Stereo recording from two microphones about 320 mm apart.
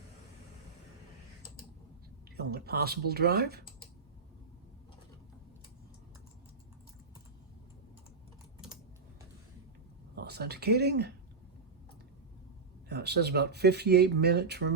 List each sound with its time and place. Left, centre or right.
2.3 s speech: right
10.2 s speech: right
12.9 s speech: right